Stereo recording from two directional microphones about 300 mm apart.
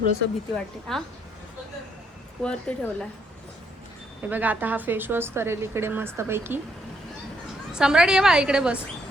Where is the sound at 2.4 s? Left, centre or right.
Centre.